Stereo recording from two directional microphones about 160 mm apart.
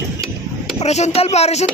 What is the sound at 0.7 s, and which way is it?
Speech, 45° left (ahead or behind).